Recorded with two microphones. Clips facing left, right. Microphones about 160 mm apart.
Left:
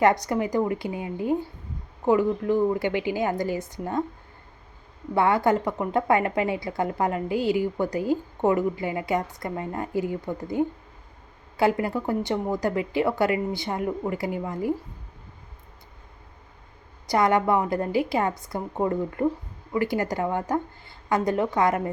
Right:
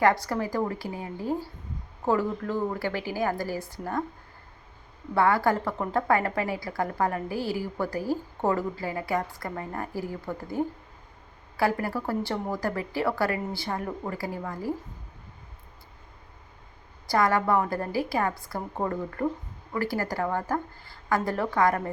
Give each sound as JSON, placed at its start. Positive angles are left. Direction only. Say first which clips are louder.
{"t": 0.0, "sound": "a woman's voice", "louder": "left 3 dB", "side_deg": 20}
{"t": 5.1, "sound": "a woman's voice", "louder": "left 2 dB", "side_deg": 20}
{"t": 17.1, "sound": "a woman's voice", "louder": "left 2 dB", "side_deg": 20}